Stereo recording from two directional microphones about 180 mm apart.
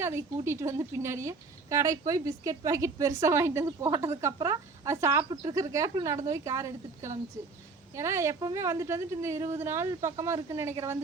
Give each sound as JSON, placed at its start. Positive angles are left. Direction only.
{"t": 0.0, "sound": "a woman's voice", "side_deg": -15}